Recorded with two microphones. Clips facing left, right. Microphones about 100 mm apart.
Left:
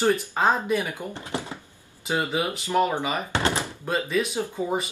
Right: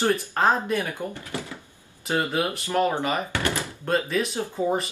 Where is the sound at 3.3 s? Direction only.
20° left (ahead or behind).